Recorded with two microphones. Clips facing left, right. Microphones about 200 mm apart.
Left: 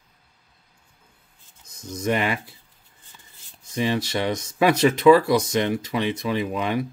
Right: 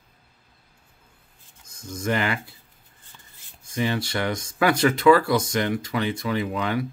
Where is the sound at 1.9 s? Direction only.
20° left (ahead or behind).